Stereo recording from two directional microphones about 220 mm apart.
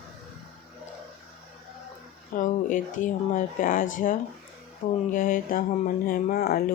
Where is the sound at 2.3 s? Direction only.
35° left (ahead or behind).